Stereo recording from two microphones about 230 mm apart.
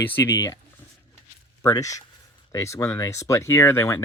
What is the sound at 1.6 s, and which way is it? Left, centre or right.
Speech, centre.